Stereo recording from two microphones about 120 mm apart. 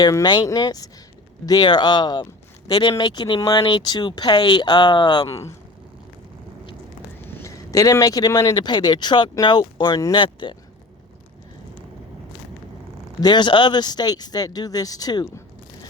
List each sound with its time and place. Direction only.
0.0 s speech: 30° left (ahead or behind)
5.3 s speech: 25° left (ahead or behind)
7.3 s speech: 20° left (ahead or behind); by 10.5 s 45° left (ahead or behind)
13.1 s speech: 35° left (ahead or behind)